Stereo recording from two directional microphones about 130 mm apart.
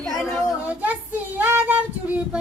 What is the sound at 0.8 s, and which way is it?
Child singing, 10° right (ahead or behind).